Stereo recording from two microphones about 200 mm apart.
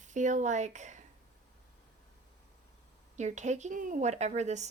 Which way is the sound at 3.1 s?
35° right (ahead or behind).